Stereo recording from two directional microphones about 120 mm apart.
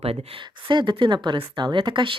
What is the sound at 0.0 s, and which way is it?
Speech, 55° right (ahead or behind).